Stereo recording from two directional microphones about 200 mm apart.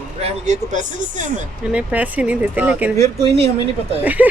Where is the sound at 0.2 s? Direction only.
35° right (ahead or behind).